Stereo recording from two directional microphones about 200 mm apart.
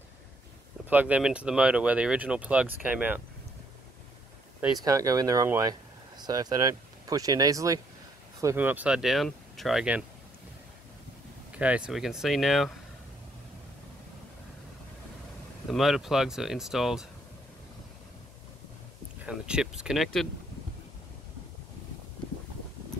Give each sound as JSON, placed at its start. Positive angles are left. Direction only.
{"t": 0.8, "sound": "speech", "side_deg": -5}
{"t": 4.6, "sound": "speech", "side_deg": -15}
{"t": 11.5, "sound": "speech", "side_deg": -5}
{"t": 15.7, "sound": "speech", "side_deg": 0}
{"t": 19.2, "sound": "speech", "side_deg": -5}